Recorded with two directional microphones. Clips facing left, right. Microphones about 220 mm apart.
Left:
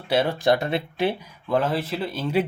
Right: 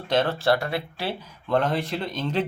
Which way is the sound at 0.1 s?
10° left (ahead or behind).